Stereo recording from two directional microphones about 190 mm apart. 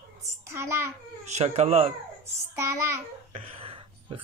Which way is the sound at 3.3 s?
30° right (ahead or behind).